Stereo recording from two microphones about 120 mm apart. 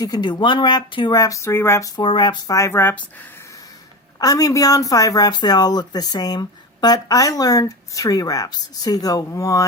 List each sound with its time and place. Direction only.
0.0 s speech: 35° left (ahead or behind)
2.0 s speech: 40° left (ahead or behind)
2.6 s speech: 20° left (ahead or behind)
4.2 s speech: 30° left (ahead or behind)